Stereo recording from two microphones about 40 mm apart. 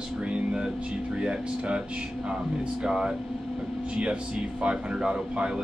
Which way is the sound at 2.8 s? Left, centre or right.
Right.